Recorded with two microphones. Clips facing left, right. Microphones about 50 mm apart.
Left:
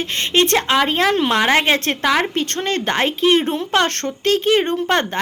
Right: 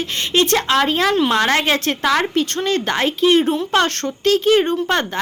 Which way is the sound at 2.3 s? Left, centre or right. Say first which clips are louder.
Right 2 dB; left.